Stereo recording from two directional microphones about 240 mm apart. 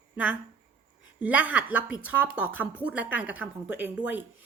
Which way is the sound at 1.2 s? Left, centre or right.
Centre.